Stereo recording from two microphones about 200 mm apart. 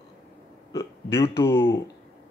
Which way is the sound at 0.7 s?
15° left (ahead or behind).